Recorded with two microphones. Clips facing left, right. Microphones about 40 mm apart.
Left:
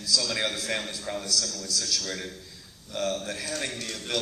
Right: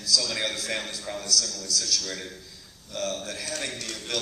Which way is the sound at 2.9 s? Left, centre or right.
Left.